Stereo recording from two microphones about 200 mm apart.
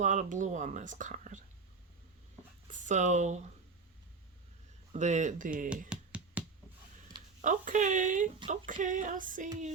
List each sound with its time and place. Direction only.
0.0 s speech: 35° right (ahead or behind)
2.7 s speech: 40° right (ahead or behind)
4.9 s speech: 35° right (ahead or behind)
5.9 s music: 5° right (ahead or behind)
7.4 s speech: 40° right (ahead or behind)